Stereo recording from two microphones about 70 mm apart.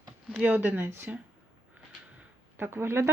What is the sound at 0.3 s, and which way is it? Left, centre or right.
Speech, right.